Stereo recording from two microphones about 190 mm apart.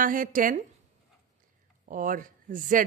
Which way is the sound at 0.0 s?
45° right (ahead or behind).